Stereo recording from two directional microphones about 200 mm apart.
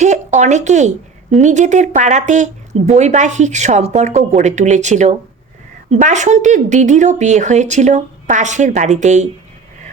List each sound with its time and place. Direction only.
0.0 s speech: 35° right (ahead or behind)